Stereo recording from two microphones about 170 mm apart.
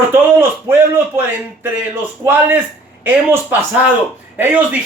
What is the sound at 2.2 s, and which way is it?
A man's voice, 10° right (ahead or behind).